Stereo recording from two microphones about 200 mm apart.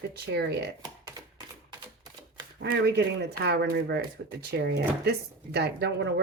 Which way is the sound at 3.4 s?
55° right (ahead or behind).